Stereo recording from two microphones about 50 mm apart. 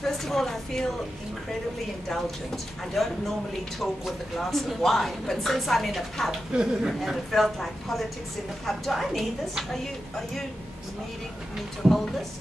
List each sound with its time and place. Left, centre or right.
0.0 s a woman's voice: centre
2.0 s speech: centre
6.5 s speech: centre
6.9 s speech: centre
11.8 s speech: centre